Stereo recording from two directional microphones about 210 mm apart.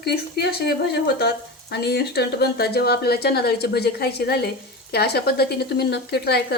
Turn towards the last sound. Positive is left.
turn(degrees=50)  # may be behind; listen again after turning